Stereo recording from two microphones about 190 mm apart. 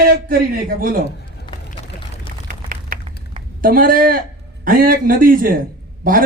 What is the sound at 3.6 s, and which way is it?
A man's voice, 45° right (ahead or behind).